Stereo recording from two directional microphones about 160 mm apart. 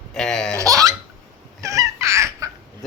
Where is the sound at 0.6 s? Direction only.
20° right (ahead or behind).